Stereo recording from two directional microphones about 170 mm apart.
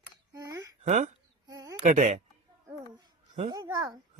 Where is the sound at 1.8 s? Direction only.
45° right (ahead or behind).